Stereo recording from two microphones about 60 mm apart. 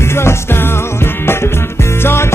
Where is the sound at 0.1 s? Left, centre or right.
Left.